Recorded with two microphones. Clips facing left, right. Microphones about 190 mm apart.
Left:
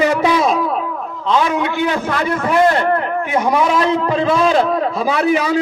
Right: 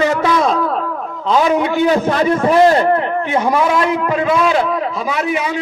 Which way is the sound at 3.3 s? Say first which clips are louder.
Even; 10° left (ahead or behind).